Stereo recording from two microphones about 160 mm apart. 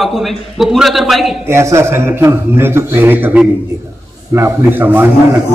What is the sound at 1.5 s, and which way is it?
A man's voice, 15° right (ahead or behind).